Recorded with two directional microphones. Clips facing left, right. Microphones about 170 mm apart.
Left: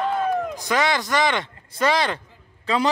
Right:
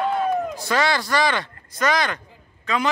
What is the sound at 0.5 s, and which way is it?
A man's voice, 15° left (ahead or behind).